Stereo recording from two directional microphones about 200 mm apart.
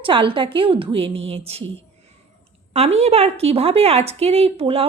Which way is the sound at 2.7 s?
30° right (ahead or behind).